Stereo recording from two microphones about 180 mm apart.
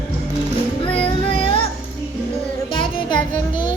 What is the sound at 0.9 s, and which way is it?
Music, 30° left (ahead or behind).